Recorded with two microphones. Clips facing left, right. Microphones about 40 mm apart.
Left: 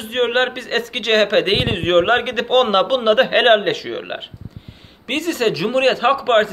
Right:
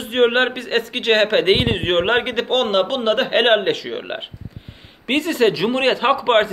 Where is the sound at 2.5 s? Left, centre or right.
Centre.